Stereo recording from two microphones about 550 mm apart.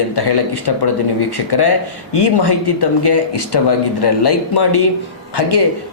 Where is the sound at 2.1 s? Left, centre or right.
Left.